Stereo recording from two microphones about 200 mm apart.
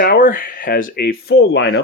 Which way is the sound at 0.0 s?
45° left (ahead or behind).